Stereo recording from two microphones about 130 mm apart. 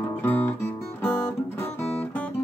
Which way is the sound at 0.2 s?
10° left (ahead or behind).